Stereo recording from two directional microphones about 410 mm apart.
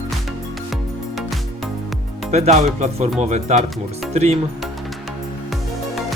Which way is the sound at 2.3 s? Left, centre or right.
Centre.